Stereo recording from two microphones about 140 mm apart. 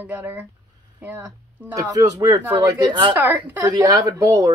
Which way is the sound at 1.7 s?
25° right (ahead or behind).